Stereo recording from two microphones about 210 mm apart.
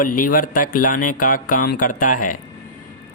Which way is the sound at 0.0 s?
40° left (ahead or behind).